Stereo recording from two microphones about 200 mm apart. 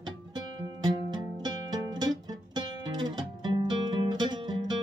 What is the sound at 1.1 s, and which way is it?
Music, 20° right (ahead or behind).